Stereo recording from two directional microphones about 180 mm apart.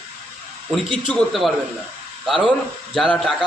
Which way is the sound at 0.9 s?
5° left (ahead or behind).